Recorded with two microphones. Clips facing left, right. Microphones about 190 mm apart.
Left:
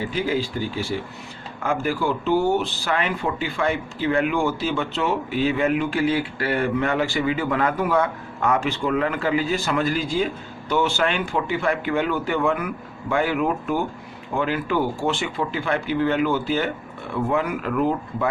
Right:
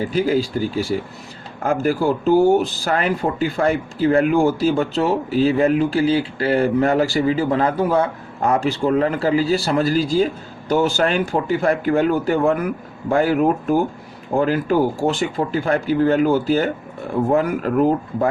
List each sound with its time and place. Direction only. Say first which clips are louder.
0.0 s speech: right 5 dB; 40° right (ahead or behind)